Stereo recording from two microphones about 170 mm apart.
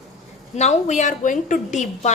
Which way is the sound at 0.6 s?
45° left (ahead or behind).